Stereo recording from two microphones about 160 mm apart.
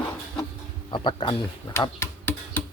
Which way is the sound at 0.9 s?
30° left (ahead or behind).